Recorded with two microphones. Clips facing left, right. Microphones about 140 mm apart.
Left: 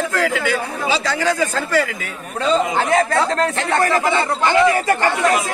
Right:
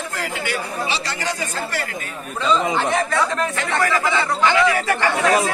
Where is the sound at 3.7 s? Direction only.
45° left (ahead or behind).